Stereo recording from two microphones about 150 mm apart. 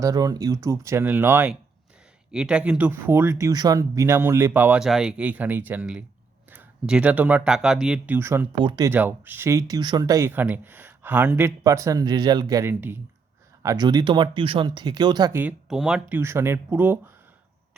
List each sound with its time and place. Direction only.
0.0 s speech: 25° right (ahead or behind)
8.5 s speech: 30° right (ahead or behind)
8.9 s speech: 15° right (ahead or behind); by 15.3 s 30° right (ahead or behind)
15.3 s speech: 10° right (ahead or behind)